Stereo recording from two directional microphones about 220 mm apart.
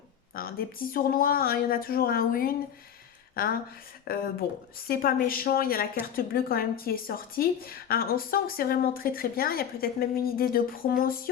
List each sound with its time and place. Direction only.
0.3 s a woman's voice: 40° left (ahead or behind)